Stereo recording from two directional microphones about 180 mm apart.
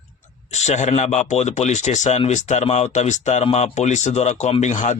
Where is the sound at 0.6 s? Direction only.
40° left (ahead or behind).